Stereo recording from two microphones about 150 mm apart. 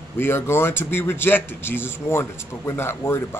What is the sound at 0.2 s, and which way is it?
Speech, 15° left (ahead or behind).